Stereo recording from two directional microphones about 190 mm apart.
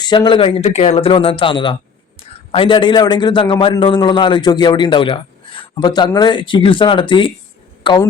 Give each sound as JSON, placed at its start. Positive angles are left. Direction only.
{"t": 0.0, "sound": "a man's voice", "side_deg": 25}